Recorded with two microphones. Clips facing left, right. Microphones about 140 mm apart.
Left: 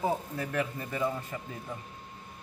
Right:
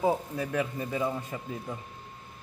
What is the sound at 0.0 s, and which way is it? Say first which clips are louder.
Speech: right 3 dB; 15° right (ahead or behind).